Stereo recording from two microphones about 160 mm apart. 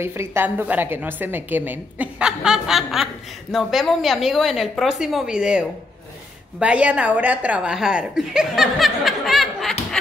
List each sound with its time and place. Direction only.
0.0 s a woman's voice: 15° right (ahead or behind); by 9.8 s centre (ahead or behind)